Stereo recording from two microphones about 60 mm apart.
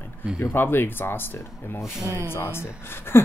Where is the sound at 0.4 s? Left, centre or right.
Left.